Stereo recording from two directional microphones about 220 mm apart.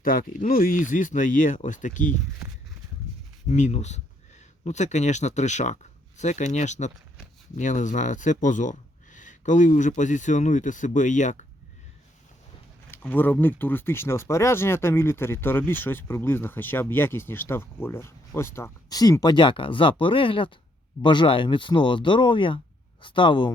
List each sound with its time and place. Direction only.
0.1 s speech: 40° left (ahead or behind)
3.5 s speech: 30° left (ahead or behind)
12.9 s speech: 10° left (ahead or behind)